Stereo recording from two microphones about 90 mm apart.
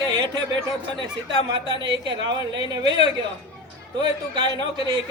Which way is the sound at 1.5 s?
65° right (ahead or behind).